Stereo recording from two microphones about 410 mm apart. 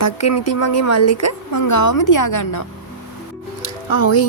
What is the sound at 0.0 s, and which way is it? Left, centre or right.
A woman's voice, left.